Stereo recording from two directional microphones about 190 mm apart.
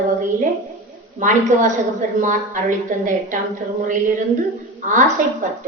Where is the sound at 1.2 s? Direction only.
40° right (ahead or behind).